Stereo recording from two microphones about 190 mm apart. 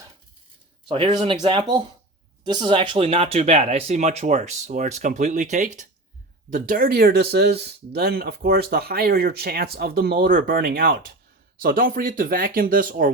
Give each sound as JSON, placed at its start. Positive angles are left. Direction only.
{"t": 0.9, "sound": "speech", "side_deg": -30}